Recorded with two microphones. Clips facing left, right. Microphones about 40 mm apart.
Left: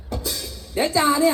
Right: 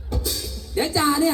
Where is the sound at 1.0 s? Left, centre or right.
Left.